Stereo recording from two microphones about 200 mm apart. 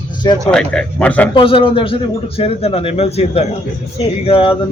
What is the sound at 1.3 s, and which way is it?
A man's voice, 25° left (ahead or behind).